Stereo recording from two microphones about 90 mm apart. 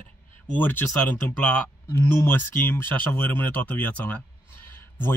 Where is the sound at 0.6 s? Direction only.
20° left (ahead or behind).